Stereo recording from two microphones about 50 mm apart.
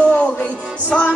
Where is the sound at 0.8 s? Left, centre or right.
Left.